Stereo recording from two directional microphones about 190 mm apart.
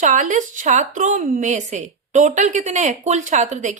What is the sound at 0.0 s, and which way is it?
Speech, 40° right (ahead or behind).